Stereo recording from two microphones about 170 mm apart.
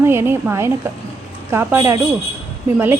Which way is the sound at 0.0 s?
15° right (ahead or behind).